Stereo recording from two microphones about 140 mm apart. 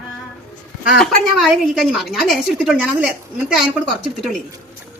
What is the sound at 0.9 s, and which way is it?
A woman's voice, centre (ahead or behind).